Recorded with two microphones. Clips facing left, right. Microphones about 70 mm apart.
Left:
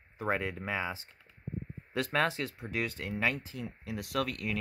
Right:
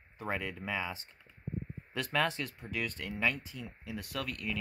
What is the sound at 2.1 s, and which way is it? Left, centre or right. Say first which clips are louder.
Speech: left 1 dB; left.